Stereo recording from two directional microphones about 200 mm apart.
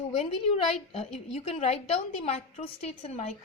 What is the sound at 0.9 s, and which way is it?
A woman's voice, 30° left (ahead or behind).